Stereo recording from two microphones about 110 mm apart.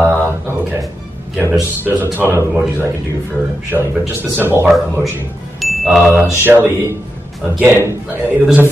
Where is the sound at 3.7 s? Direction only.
20° right (ahead or behind).